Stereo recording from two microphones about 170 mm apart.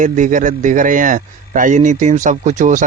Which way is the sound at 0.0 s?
50° right (ahead or behind).